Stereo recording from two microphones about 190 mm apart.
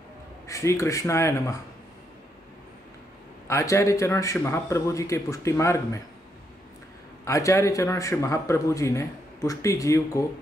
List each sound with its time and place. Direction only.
0.5 s speech: 15° left (ahead or behind)
3.4 s speech: 15° left (ahead or behind)
7.2 s speech: 15° left (ahead or behind)